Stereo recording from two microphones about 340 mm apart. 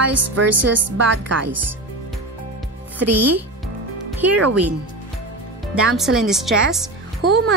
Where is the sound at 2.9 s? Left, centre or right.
Right.